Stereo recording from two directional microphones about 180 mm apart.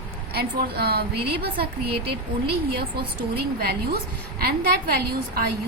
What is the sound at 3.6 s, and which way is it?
A woman's voice, 55° right (ahead or behind).